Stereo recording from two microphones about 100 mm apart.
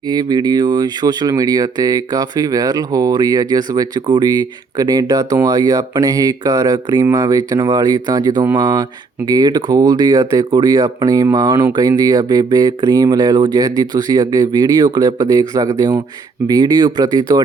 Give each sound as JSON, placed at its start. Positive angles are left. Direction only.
{"t": 0.1, "sound": "speech", "side_deg": -40}